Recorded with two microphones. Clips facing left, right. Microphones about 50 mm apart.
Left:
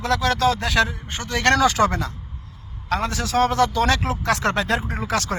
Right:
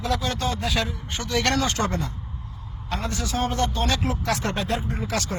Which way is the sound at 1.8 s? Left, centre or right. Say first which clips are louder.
Left 6 dB; left.